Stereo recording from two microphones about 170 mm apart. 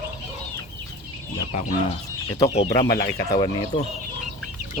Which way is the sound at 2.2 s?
20° left (ahead or behind).